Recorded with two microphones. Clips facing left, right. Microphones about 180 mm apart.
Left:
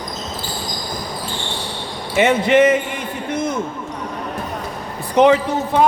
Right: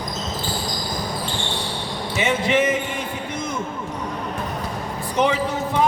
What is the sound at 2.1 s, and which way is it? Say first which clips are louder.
Speech: left 7 dB; 60° left (ahead or behind).